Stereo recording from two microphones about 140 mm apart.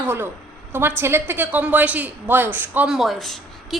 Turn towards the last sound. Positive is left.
turn(degrees=0)  # may be behind; listen again after turning